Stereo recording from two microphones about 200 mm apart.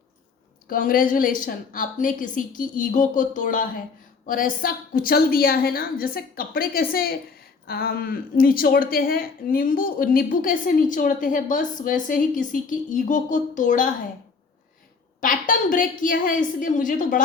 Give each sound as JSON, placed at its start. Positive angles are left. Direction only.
{"t": 0.7, "sound": "a woman's voice", "side_deg": 45}
{"t": 15.2, "sound": "a woman's voice", "side_deg": 45}